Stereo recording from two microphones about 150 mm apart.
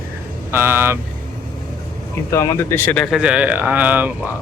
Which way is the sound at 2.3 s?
20° left (ahead or behind).